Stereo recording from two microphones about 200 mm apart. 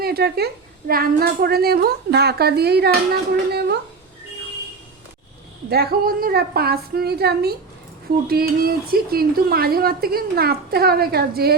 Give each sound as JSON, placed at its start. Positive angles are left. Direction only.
{"t": 0.0, "sound": "a woman's voice", "side_deg": -50}
{"t": 5.6, "sound": "a woman's voice", "side_deg": -55}